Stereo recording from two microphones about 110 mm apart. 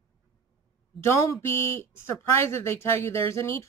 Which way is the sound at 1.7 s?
25° left (ahead or behind).